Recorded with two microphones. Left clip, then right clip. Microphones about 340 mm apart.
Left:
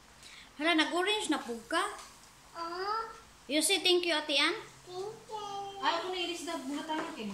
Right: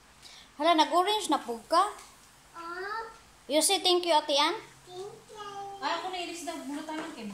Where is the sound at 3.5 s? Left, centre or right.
Centre.